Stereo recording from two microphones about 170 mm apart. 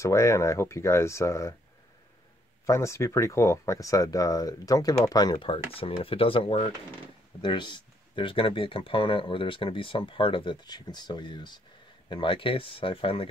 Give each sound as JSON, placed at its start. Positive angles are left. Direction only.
{"t": 0.0, "sound": "speech", "side_deg": 20}
{"t": 2.6, "sound": "speech", "side_deg": 15}